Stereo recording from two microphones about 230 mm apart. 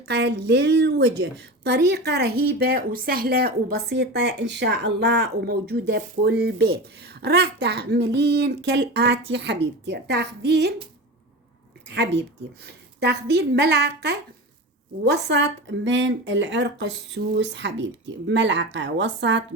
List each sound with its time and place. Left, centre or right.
0.1 s a woman's voice: right
11.9 s a woman's voice: right